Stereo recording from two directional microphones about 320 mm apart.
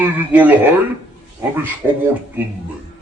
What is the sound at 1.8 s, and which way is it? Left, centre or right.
Speech, centre.